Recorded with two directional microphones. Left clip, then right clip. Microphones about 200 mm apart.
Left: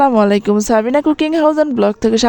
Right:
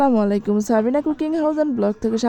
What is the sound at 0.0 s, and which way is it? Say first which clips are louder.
Speech: left 7 dB; 40° left (ahead or behind).